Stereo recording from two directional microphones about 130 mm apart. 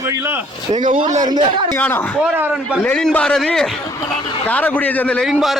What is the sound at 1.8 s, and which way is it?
Speech, 15° left (ahead or behind).